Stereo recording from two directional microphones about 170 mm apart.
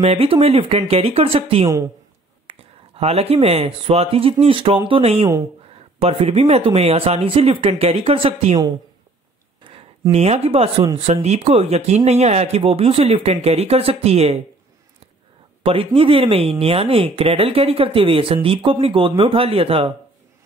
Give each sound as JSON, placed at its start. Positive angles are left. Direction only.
{"t": 0.0, "sound": "speech", "side_deg": -35}
{"t": 9.6, "sound": "a sound", "side_deg": -30}
{"t": 10.1, "sound": "speech", "side_deg": -35}
{"t": 15.6, "sound": "speech", "side_deg": -30}